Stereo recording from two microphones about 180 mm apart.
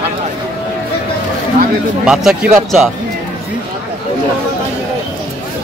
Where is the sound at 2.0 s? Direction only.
Centre (ahead or behind).